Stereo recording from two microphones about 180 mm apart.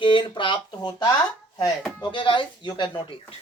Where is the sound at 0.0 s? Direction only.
25° left (ahead or behind).